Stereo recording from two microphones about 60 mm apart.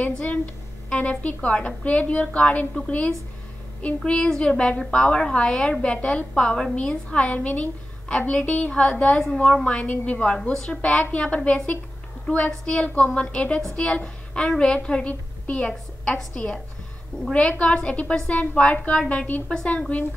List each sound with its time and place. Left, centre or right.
0.0 s a woman's voice: left